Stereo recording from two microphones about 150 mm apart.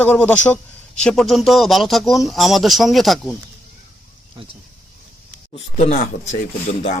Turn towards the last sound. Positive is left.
turn(degrees=50)  # may be behind; listen again after turning